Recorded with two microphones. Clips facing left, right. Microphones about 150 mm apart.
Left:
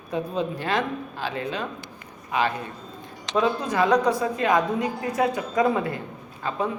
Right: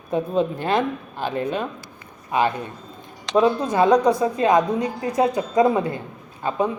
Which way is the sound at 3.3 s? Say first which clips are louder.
Right 5 dB; 25° right (ahead or behind).